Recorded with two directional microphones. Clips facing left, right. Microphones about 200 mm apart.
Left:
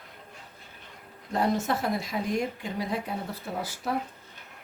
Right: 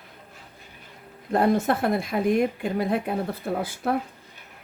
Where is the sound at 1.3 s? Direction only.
55° right (ahead or behind).